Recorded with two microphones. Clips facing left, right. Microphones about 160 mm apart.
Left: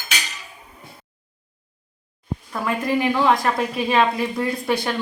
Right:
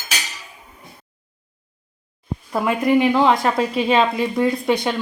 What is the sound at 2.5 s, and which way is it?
A woman's voice, 20° right (ahead or behind).